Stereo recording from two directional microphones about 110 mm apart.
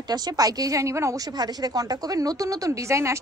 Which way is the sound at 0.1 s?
35° right (ahead or behind).